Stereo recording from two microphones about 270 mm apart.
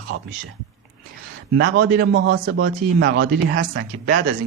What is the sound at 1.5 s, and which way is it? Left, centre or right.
A man's voice, right.